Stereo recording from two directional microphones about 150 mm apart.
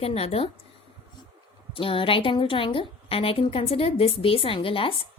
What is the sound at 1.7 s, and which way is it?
A woman's voice, 35° left (ahead or behind).